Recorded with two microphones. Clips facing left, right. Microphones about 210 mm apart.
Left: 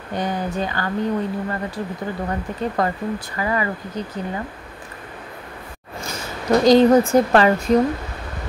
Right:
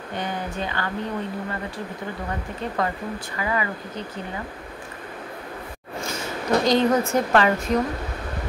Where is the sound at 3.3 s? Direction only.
40° left (ahead or behind).